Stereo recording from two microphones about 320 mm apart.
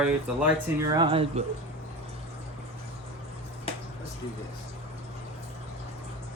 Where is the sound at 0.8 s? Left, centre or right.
Centre.